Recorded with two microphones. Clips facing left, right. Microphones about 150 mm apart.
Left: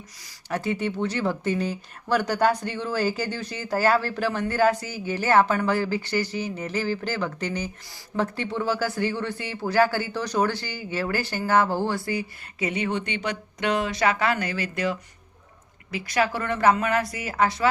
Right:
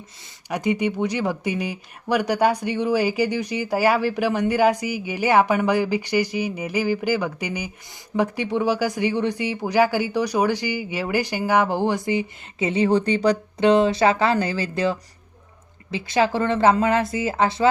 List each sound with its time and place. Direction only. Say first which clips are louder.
0.4 s speech: right 4 dB; 15° right (ahead or behind)